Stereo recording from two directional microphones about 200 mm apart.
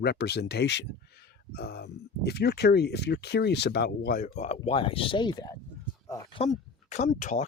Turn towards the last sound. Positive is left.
turn(degrees=40)  # may be behind; listen again after turning